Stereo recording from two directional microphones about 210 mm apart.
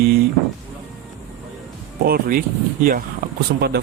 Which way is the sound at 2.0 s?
45° right (ahead or behind).